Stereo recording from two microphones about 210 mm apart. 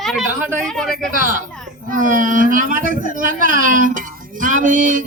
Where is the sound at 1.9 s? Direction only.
40° right (ahead or behind).